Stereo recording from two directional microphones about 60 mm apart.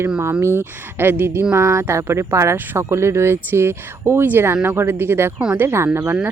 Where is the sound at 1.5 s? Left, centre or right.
Right.